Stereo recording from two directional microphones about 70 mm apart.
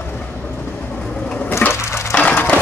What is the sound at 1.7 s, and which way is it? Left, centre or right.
Crushing, left.